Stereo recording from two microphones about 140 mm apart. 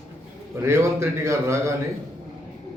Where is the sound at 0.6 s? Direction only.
20° right (ahead or behind).